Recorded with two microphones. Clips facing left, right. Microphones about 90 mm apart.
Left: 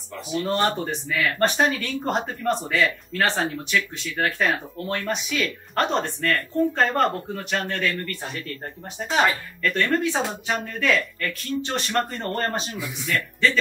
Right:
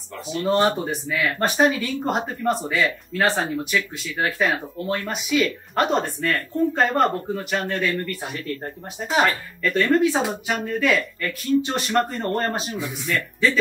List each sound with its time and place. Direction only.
0.5 s speech: 5° right (ahead or behind)